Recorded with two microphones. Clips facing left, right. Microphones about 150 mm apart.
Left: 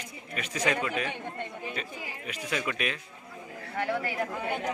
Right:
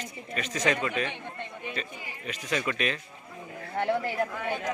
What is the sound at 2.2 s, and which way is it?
Speech, 10° left (ahead or behind).